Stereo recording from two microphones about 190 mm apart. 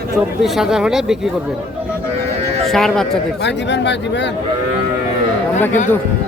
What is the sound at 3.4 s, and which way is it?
Speech, 65° left (ahead or behind).